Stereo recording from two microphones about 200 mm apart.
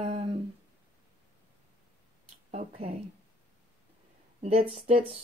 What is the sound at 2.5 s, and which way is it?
Speech, 30° right (ahead or behind).